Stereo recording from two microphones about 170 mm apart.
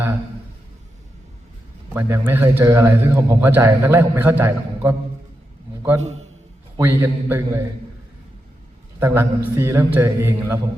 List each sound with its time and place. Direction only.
1.9 s a man's voice: 15° right (ahead or behind)
6.0 s a man's voice: 40° right (ahead or behind)
6.7 s a man's voice: 15° right (ahead or behind)
9.0 s a man's voice: 15° right (ahead or behind)